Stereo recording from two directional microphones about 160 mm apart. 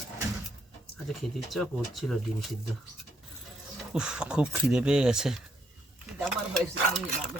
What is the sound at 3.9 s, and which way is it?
Speech, 5° right (ahead or behind).